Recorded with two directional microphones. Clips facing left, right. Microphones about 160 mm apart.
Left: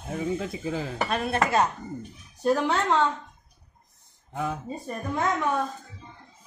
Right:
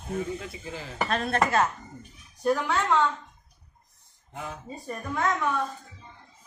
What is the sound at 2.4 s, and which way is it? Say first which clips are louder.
Speech: left 2 dB; 25° left (ahead or behind).